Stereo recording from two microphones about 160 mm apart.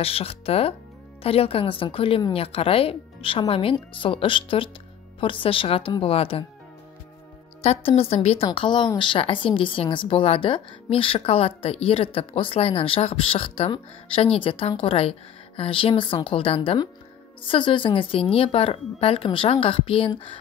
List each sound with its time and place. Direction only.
0.0 s a woman's voice: 40° left (ahead or behind)
7.6 s a woman's voice: 40° left (ahead or behind)